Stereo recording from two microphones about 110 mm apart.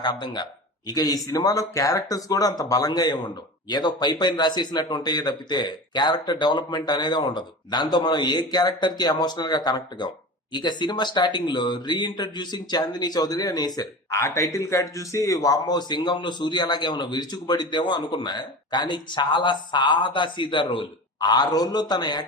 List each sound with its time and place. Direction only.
0.0 s a man's voice: 45° left (ahead or behind)